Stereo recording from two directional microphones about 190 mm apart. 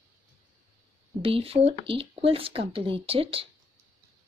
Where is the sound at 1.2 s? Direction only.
30° right (ahead or behind).